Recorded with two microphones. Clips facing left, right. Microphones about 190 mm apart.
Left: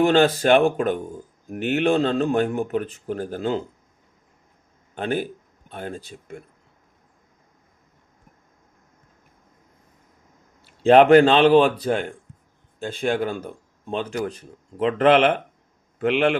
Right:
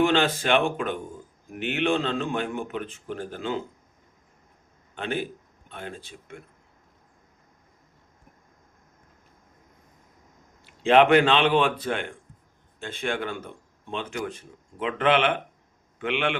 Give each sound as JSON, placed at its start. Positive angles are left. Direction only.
{"t": 0.0, "sound": "speech", "side_deg": 40}
{"t": 4.9, "sound": "speech", "side_deg": 40}
{"t": 10.8, "sound": "a man's voice", "side_deg": 40}